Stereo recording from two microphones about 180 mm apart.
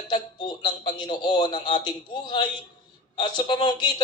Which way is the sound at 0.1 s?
25° left (ahead or behind).